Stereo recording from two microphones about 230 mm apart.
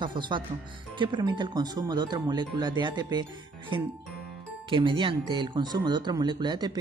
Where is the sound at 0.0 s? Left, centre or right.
Centre.